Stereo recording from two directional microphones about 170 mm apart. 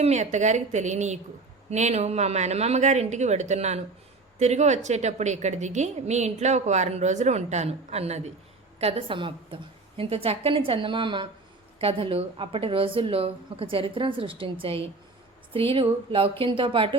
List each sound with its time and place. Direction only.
0.0 s a woman's voice: 40° right (ahead or behind)